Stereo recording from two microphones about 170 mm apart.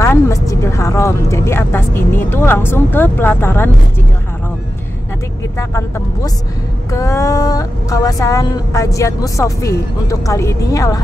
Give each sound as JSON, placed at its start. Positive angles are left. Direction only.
{"t": 0.0, "sound": "a woman's voice", "side_deg": 15}
{"t": 5.6, "sound": "a woman's voice", "side_deg": 15}